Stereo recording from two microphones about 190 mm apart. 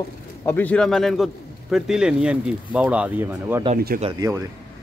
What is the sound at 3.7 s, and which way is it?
Speech, 50° right (ahead or behind).